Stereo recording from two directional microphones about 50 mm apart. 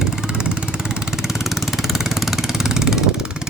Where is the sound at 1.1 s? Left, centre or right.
Centre.